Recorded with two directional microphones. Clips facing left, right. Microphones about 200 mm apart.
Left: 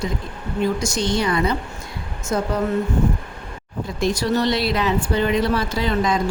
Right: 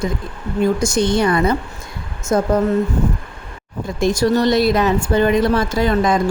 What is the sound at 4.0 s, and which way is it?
Speech, 45° right (ahead or behind).